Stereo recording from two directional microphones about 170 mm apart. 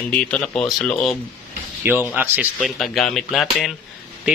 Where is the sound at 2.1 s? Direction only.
10° right (ahead or behind).